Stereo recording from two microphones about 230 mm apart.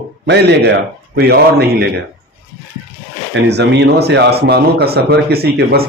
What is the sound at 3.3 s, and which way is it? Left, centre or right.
Speech, right.